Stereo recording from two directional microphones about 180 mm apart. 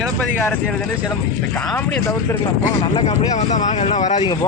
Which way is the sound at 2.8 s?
30° left (ahead or behind).